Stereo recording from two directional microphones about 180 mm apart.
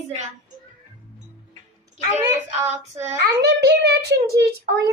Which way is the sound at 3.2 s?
70° right (ahead or behind).